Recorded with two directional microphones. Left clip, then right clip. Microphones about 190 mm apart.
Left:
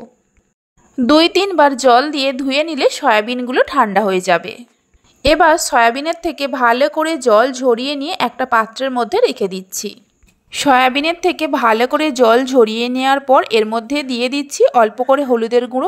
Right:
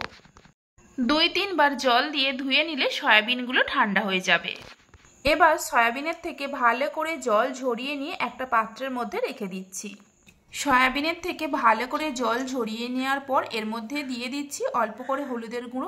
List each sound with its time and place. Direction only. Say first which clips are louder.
1.0 s speech: left 11 dB; 50° left (ahead or behind)
5.2 s a woman's voice: left 9 dB; 35° left (ahead or behind)